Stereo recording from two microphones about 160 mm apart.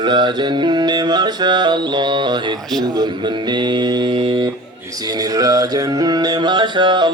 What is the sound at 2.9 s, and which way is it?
Music, 25° right (ahead or behind).